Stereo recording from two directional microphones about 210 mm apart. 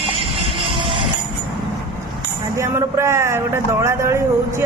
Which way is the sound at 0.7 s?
25° right (ahead or behind).